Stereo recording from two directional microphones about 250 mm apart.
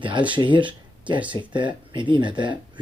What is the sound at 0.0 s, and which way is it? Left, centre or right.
Speech, centre.